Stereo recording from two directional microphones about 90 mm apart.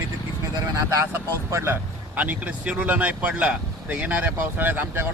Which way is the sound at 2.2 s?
15° right (ahead or behind).